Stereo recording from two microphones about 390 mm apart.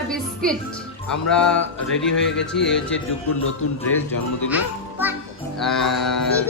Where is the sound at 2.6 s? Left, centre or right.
Centre.